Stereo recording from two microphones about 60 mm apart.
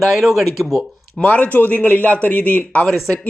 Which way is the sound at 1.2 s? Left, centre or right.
Left.